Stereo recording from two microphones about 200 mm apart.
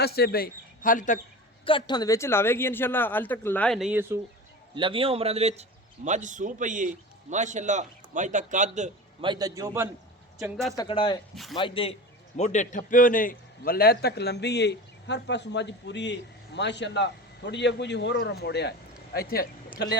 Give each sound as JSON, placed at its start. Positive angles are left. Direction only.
{"t": 0.0, "sound": "speech", "side_deg": 50}
{"t": 1.6, "sound": "speech", "side_deg": 25}
{"t": 4.7, "sound": "a man's voice", "side_deg": -25}
{"t": 9.2, "sound": "a man's voice", "side_deg": -20}
{"t": 10.8, "sound": "a man's voice", "side_deg": 25}